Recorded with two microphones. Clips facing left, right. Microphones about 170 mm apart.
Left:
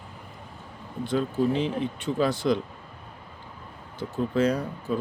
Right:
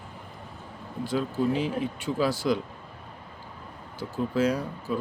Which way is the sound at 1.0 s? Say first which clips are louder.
Left 2 dB; 5° right (ahead or behind).